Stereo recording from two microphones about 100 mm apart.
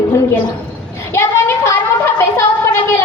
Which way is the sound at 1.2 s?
25° left (ahead or behind).